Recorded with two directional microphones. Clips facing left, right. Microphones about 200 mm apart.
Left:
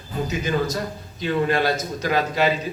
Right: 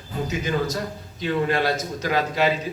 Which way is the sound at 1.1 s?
45° left (ahead or behind).